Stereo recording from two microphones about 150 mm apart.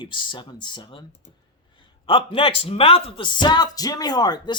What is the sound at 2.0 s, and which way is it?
Speech, 35° left (ahead or behind).